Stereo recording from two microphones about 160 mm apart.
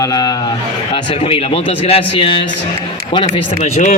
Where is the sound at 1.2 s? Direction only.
35° left (ahead or behind).